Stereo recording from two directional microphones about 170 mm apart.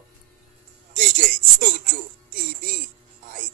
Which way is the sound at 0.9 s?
55° right (ahead or behind).